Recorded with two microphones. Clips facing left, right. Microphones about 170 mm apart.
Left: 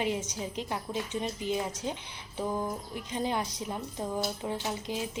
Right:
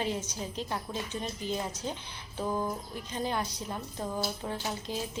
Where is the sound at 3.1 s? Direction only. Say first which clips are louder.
Left 1 dB; 20° left (ahead or behind).